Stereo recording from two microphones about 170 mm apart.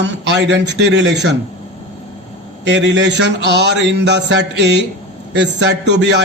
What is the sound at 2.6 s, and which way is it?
A man's voice, 90° right.